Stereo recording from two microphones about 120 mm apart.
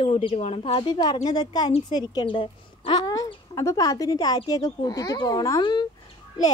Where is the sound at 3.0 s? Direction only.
35° left (ahead or behind).